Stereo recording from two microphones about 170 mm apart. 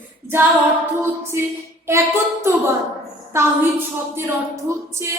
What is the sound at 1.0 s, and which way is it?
A woman's voice, 15° right (ahead or behind).